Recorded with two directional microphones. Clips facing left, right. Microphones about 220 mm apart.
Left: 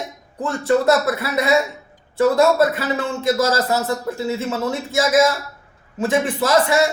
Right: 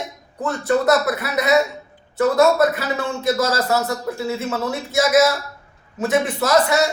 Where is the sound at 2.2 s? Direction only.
30° left (ahead or behind).